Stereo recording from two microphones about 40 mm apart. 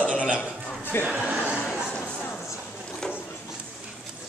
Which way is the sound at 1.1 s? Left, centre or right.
Right.